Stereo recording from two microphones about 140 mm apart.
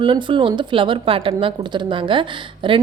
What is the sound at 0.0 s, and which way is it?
A woman's voice, 35° right (ahead or behind).